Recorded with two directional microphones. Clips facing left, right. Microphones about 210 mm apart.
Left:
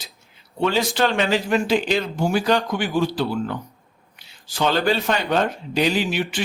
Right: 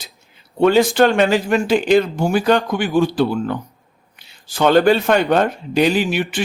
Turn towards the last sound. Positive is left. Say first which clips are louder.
# right 4 dB
turn(degrees=-55)  # may be behind; listen again after turning